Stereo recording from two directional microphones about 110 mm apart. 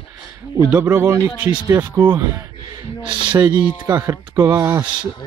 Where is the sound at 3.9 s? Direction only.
30° right (ahead or behind).